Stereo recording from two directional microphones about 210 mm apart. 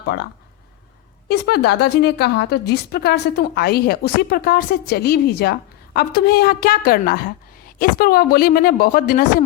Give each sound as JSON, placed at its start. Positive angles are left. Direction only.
{"t": 0.0, "sound": "speech", "side_deg": 50}
{"t": 1.3, "sound": "a woman's voice", "side_deg": 50}